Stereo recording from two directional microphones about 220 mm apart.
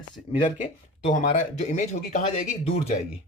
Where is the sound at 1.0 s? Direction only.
30° left (ahead or behind).